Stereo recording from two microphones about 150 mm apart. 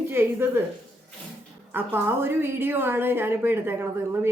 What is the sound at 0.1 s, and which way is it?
Speech, 15° right (ahead or behind).